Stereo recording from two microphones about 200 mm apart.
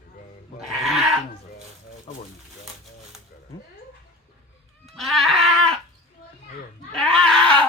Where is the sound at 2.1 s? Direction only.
35° left (ahead or behind).